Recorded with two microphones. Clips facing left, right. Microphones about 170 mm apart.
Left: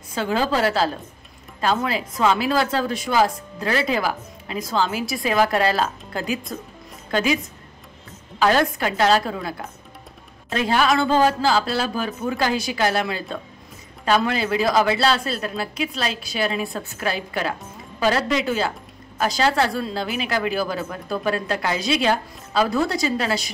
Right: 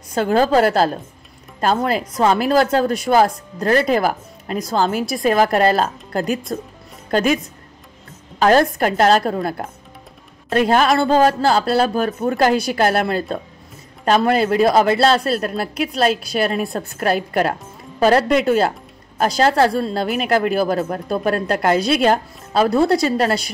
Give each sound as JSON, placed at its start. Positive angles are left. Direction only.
{"t": 0.1, "sound": "a woman's voice", "side_deg": -45}
{"t": 8.4, "sound": "a woman's voice", "side_deg": -45}
{"t": 11.6, "sound": "a woman's voice", "side_deg": -55}
{"t": 19.1, "sound": "a woman's voice", "side_deg": -45}